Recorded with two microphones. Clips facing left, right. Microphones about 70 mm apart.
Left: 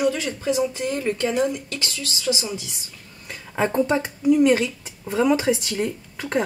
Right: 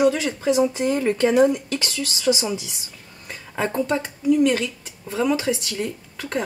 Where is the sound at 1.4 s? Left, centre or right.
Right.